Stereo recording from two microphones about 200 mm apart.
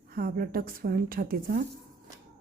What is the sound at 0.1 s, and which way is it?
A woman's voice, 50° right (ahead or behind).